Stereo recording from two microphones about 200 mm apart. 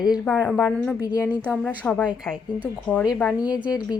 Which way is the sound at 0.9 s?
15° left (ahead or behind).